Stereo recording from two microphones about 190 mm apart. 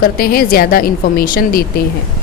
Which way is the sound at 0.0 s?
50° left (ahead or behind).